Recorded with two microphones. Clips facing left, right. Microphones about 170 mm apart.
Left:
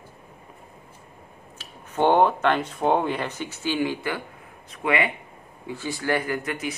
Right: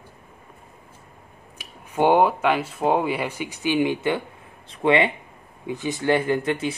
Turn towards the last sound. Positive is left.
turn(degrees=-30)  # may be behind; listen again after turning